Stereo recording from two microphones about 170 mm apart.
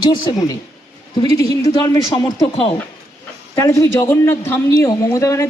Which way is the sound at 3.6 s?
15° left (ahead or behind).